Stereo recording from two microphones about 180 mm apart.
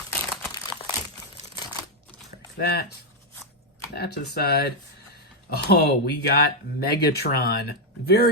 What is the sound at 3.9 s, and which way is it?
Speech, 60° left (ahead or behind).